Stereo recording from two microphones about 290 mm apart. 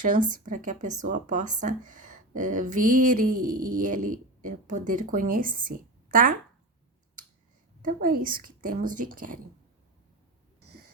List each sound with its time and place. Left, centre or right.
0.0 s speech: right
7.8 s speech: right